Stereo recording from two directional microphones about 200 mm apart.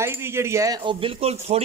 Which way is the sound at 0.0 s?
10° right (ahead or behind).